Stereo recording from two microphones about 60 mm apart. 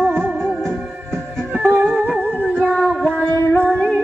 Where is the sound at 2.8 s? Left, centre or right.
Centre.